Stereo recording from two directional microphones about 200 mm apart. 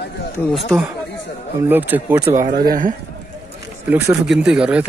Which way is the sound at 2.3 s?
45° right (ahead or behind).